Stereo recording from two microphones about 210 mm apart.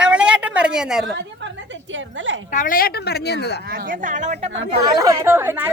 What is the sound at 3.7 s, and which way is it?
Speech, 40° right (ahead or behind).